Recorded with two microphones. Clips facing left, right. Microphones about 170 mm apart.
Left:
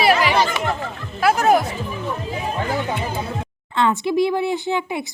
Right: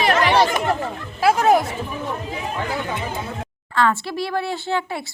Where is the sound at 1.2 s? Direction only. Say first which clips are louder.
Even; 25° right (ahead or behind).